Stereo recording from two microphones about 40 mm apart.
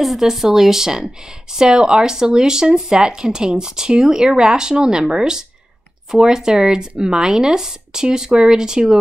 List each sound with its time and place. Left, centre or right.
0.0 s speech: centre